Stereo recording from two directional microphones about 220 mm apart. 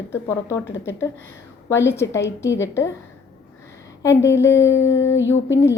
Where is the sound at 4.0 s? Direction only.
15° left (ahead or behind).